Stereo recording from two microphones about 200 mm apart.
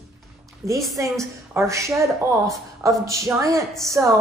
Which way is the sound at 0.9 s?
15° right (ahead or behind).